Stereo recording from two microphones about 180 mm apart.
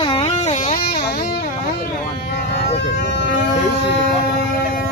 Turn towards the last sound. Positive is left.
turn(degrees=85)